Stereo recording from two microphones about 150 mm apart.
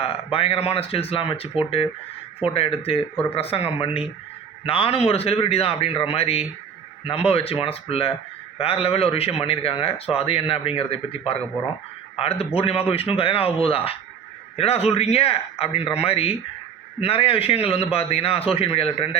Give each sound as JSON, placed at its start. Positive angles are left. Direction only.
{"t": 0.0, "sound": "a man's voice", "side_deg": 40}